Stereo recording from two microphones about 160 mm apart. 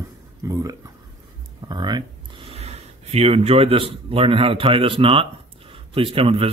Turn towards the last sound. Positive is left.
turn(degrees=-35)  # may be behind; listen again after turning